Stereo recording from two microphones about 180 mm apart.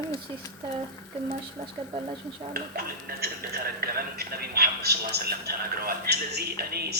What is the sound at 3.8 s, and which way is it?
A man's voice, 60° right (ahead or behind).